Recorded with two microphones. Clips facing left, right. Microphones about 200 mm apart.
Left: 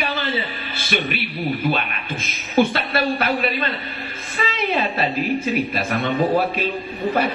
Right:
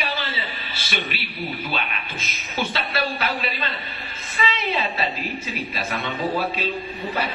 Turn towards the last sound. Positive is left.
turn(degrees=50)  # may be behind; listen again after turning